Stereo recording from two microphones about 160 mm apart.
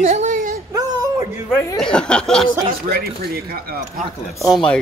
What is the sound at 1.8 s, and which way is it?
Speech, 5° left (ahead or behind).